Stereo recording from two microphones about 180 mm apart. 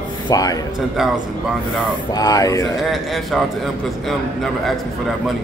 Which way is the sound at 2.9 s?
Centre (ahead or behind).